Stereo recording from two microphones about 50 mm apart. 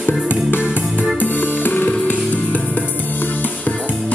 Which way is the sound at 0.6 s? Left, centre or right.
Right.